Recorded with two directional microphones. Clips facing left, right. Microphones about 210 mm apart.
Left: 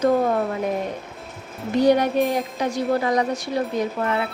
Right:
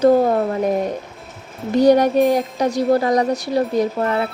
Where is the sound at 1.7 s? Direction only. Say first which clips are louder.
Right 4 dB; 40° right (ahead or behind).